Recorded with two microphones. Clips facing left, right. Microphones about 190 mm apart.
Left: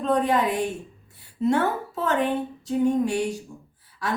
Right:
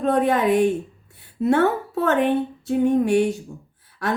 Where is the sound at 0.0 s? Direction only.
60° right (ahead or behind).